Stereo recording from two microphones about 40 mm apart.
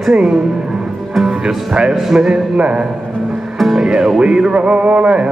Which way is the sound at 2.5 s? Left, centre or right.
Right.